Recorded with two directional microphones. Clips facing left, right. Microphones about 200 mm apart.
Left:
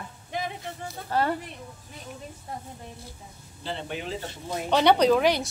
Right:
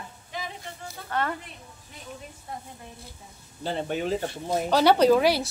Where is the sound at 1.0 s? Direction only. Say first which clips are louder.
Left 3 dB; 30° left (ahead or behind).